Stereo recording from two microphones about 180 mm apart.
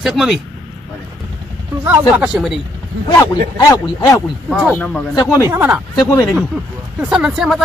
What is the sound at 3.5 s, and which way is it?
Speech, 20° left (ahead or behind).